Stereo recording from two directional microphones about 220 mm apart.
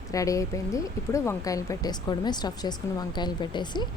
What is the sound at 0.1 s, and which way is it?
Speech, 15° left (ahead or behind).